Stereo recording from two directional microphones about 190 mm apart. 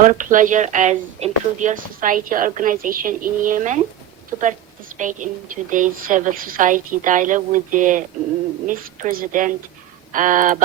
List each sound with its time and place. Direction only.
0.0 s speech: 40° right (ahead or behind)
4.9 s a woman's voice: 40° right (ahead or behind)